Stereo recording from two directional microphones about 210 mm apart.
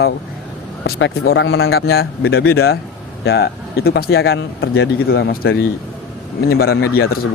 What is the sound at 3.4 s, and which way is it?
A man's voice, 45° left (ahead or behind).